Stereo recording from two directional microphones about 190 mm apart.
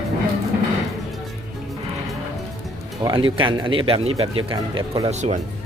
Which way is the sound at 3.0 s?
25° right (ahead or behind).